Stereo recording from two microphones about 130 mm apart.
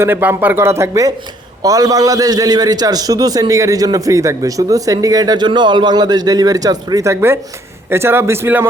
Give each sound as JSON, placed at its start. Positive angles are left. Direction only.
{"t": 0.0, "sound": "a man's voice", "side_deg": -15}